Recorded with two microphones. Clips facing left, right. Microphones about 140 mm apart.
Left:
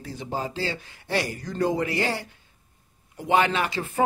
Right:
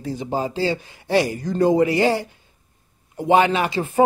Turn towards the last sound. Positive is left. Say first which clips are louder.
# right 6 dB
turn(degrees=-15)  # may be behind; listen again after turning